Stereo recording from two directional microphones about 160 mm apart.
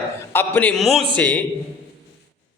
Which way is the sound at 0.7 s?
Centre (ahead or behind).